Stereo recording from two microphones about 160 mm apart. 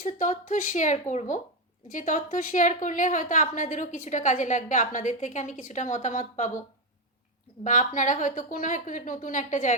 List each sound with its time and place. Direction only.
0.0 s a woman's voice: 55° left (ahead or behind)
7.6 s a woman's voice: 50° left (ahead or behind)